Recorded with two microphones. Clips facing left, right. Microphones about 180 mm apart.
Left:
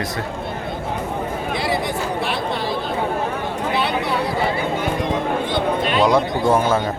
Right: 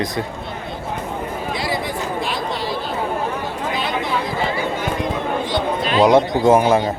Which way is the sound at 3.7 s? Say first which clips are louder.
Left 2 dB; 65° left (ahead or behind).